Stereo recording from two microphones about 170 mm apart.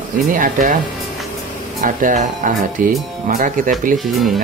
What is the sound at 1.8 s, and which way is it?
Speech, 50° right (ahead or behind).